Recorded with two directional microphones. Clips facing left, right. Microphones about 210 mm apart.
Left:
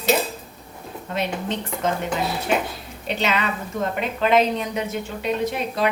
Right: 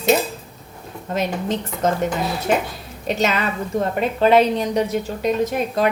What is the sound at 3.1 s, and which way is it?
A woman's voice, 45° right (ahead or behind).